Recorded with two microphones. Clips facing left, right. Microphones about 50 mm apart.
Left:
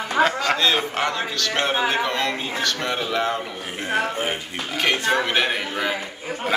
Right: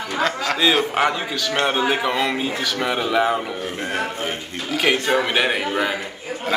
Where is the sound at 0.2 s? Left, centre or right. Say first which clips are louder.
Left 3 dB; centre.